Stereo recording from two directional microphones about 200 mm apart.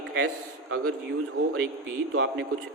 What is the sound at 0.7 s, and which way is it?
Speech, 90° right.